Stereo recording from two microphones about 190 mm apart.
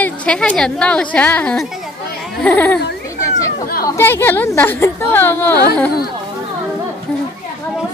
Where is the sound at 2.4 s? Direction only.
10° left (ahead or behind).